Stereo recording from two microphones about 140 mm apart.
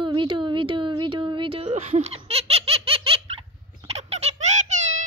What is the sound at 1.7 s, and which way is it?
Laughter, 55° right (ahead or behind).